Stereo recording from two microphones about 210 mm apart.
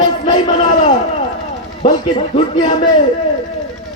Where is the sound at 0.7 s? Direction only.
35° left (ahead or behind).